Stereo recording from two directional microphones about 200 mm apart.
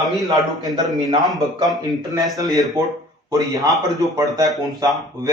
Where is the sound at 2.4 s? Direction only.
15° right (ahead or behind).